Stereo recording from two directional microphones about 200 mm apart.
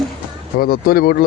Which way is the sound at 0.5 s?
50° left (ahead or behind).